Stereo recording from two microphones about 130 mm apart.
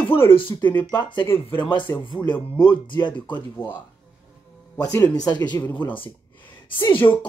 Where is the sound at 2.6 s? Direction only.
35° left (ahead or behind).